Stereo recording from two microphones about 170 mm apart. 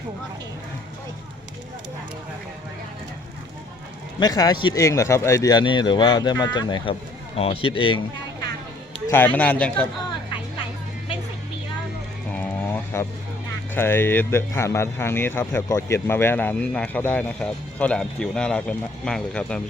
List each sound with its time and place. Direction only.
4.2 s speech: 25° left (ahead or behind)
9.0 s speech: 10° left (ahead or behind)
12.3 s a sound: 10° left (ahead or behind)
13.7 s speech: 15° left (ahead or behind)